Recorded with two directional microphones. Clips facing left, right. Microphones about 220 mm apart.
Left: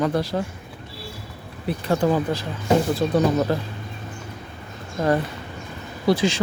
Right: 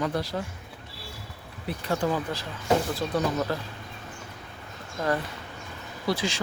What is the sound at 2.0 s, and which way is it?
Speech, 55° left (ahead or behind).